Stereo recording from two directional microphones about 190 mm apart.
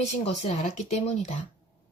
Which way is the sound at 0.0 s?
35° left (ahead or behind).